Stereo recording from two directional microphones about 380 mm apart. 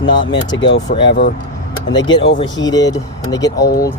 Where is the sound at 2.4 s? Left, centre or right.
Centre.